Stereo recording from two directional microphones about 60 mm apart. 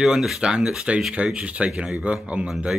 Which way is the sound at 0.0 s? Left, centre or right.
Centre.